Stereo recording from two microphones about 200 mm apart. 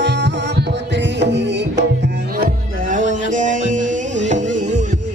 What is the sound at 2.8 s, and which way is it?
Music, 40° right (ahead or behind).